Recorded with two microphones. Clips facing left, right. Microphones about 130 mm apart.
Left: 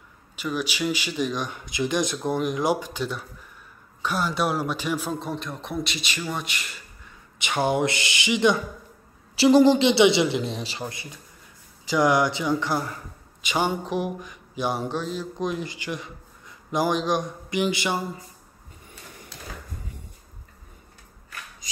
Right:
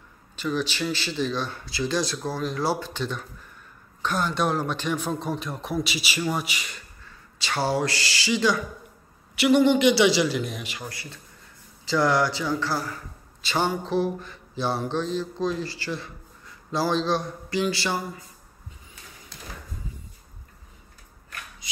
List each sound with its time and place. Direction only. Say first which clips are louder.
0.4 s a man's voice: even; 10° left (ahead or behind)
7.3 s a man's voice: left 2 dB; 20° left (ahead or behind)